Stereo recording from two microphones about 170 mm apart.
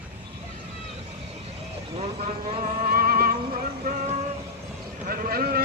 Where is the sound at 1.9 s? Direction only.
40° right (ahead or behind); by 3.3 s 55° right (ahead or behind).